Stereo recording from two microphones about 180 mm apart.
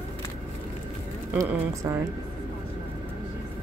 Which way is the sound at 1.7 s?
15° right (ahead or behind).